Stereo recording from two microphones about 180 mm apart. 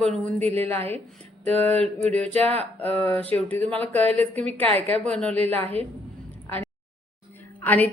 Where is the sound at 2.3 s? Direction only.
35° right (ahead or behind).